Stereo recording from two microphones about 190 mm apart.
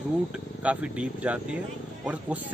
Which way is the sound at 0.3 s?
5° right (ahead or behind).